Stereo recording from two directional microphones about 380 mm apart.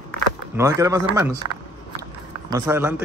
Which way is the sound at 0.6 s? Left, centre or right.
Centre.